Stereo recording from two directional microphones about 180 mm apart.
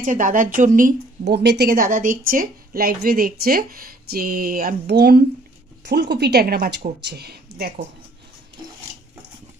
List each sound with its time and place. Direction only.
0.0 s speech: 45° right (ahead or behind)
1.2 s speech: 70° right (ahead or behind)